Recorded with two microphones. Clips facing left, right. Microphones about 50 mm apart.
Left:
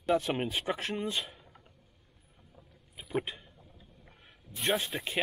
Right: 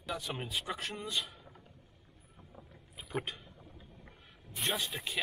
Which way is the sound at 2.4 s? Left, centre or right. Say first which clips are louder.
Right 4 dB; right.